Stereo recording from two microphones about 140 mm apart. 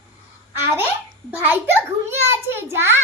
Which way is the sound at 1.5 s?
15° right (ahead or behind).